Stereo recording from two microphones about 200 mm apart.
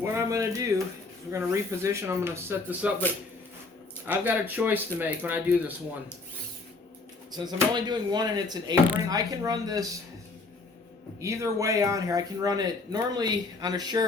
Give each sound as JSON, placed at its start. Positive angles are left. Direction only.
{"t": 0.0, "sound": "speech", "side_deg": -15}
{"t": 4.0, "sound": "speech", "side_deg": -10}
{"t": 7.3, "sound": "speech", "side_deg": -20}
{"t": 11.2, "sound": "speech", "side_deg": -15}